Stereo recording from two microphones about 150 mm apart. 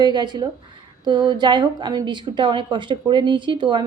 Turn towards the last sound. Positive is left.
turn(degrees=-30)  # may be behind; listen again after turning